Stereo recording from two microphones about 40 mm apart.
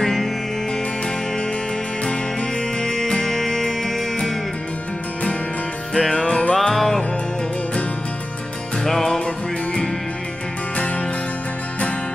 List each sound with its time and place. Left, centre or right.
0.0 s music: centre
2.8 s music: centre
5.9 s music: centre
6.5 s music: centre
8.8 s music: centre